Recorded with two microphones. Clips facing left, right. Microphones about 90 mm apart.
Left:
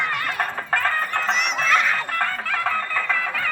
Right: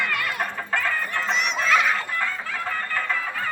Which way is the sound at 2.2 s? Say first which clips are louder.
Left 4 dB; 65° left (ahead or behind).